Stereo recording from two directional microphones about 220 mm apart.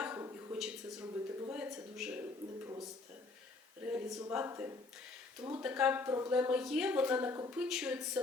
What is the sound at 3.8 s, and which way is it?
Speech, 10° right (ahead or behind).